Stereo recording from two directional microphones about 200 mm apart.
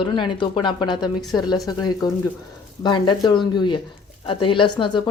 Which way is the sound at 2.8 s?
25° left (ahead or behind).